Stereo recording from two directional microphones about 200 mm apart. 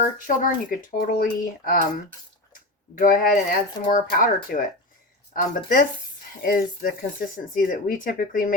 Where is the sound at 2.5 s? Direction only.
45° left (ahead or behind).